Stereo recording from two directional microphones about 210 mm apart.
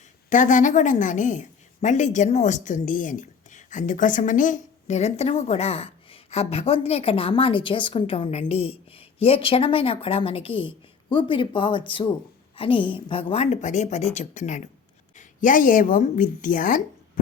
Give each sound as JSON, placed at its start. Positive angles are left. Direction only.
{"t": 0.3, "sound": "a woman's voice", "side_deg": 35}